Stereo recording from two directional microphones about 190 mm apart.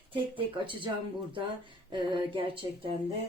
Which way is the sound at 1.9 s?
25° right (ahead or behind).